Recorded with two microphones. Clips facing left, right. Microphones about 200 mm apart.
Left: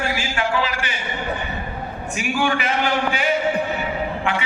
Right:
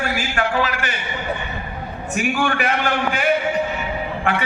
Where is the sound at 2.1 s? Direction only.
55° right (ahead or behind).